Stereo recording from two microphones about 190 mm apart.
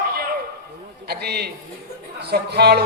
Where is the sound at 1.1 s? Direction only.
55° right (ahead or behind).